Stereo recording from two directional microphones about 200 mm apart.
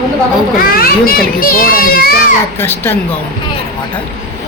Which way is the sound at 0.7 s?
50° left (ahead or behind).